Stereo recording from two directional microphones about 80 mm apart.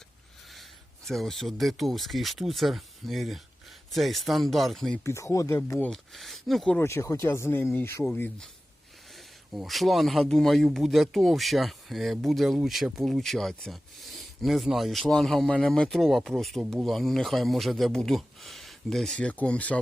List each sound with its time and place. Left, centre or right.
1.0 s speech: centre
5.0 s speech: left
5.9 s speech: centre
6.7 s speech: left
9.6 s speech: centre